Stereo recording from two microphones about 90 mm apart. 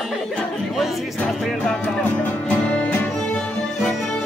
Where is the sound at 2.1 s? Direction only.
20° left (ahead or behind).